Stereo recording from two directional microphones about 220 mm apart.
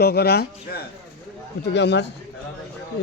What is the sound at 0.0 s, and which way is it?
Speech, 45° left (ahead or behind).